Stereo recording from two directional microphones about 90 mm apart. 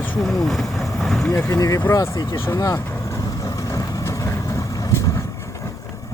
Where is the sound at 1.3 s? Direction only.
35° left (ahead or behind).